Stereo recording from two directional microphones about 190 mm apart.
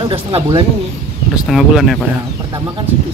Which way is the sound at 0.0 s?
25° right (ahead or behind).